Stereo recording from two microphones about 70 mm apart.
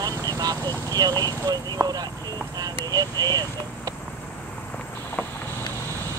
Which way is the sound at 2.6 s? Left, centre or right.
Right.